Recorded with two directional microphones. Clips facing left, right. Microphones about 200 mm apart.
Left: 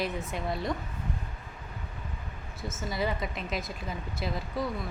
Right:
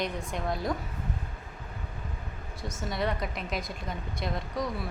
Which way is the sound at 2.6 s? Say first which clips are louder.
Even; centre (ahead or behind).